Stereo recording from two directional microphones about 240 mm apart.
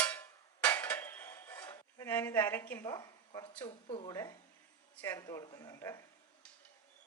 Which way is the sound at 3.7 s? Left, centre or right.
Left.